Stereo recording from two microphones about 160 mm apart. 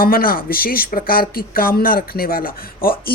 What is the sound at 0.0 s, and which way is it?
Speech, 65° left (ahead or behind).